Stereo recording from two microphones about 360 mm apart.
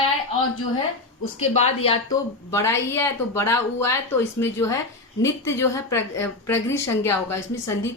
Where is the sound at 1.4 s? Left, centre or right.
Centre.